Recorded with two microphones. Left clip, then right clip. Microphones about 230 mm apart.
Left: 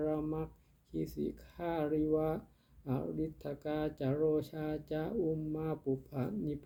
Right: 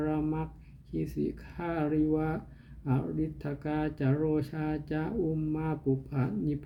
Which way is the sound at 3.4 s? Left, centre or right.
Right.